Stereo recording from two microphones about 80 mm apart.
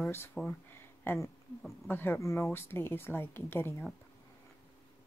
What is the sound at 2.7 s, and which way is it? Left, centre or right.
Speech, left.